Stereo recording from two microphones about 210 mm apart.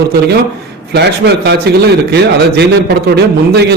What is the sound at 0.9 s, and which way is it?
A man's voice, 55° right (ahead or behind).